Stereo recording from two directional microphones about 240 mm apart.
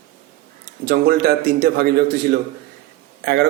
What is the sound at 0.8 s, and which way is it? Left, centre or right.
A man's voice, right.